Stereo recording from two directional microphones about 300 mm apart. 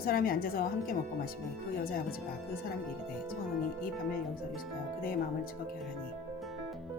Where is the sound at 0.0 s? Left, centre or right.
Left.